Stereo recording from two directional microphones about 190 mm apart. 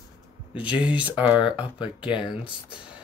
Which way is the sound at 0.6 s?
5° right (ahead or behind).